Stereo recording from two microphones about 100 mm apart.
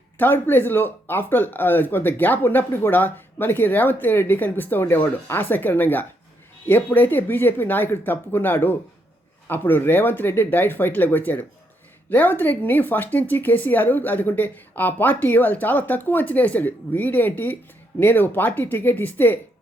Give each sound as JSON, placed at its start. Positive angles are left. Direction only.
{"t": 0.2, "sound": "speech", "side_deg": 20}